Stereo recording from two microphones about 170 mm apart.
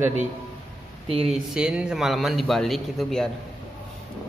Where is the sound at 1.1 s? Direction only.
35° right (ahead or behind).